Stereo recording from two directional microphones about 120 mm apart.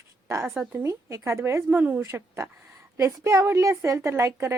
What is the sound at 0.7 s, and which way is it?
Speech, 20° right (ahead or behind).